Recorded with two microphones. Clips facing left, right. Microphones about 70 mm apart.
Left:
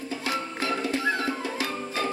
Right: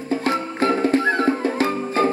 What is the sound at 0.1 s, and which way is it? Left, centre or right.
Music, right.